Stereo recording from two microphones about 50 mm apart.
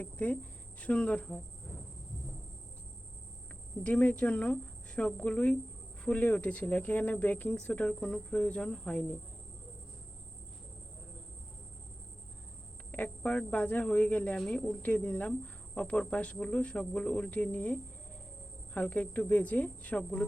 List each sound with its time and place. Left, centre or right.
0.0 s speech: left
3.8 s speech: left
7.9 s speech: centre
12.9 s speech: left
14.3 s speech: centre
14.8 s speech: left